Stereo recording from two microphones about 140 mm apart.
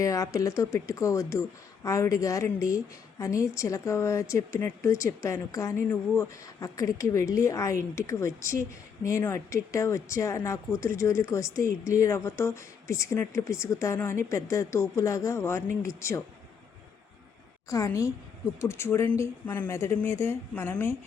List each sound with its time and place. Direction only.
0.0 s speech: 25° left (ahead or behind)
17.7 s a woman's voice: 25° left (ahead or behind)